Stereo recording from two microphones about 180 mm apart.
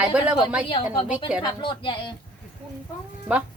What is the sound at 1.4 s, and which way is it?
Speech, 25° left (ahead or behind).